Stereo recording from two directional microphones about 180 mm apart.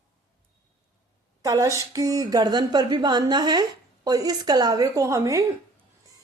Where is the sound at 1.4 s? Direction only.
20° right (ahead or behind).